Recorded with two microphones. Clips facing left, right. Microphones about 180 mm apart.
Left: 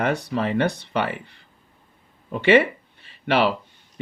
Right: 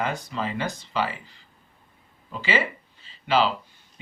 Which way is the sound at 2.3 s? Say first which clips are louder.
Left 10 dB; 65° left (ahead or behind).